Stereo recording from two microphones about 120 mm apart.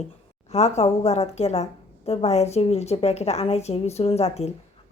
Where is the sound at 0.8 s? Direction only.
60° left (ahead or behind).